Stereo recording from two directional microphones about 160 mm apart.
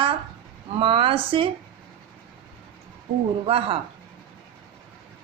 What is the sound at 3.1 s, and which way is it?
Speech, 65° right (ahead or behind).